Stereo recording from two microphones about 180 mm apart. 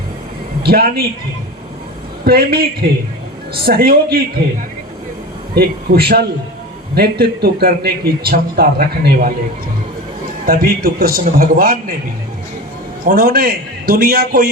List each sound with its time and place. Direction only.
0.6 s a man's voice: 60° right (ahead or behind)
2.2 s a man's voice: 60° right (ahead or behind)
5.5 s a man's voice: 60° right (ahead or behind)
10.4 s a man's voice: 55° right (ahead or behind)
13.1 s a man's voice: 55° right (ahead or behind)